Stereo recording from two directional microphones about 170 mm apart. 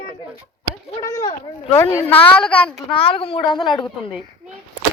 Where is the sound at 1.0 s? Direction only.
20° left (ahead or behind).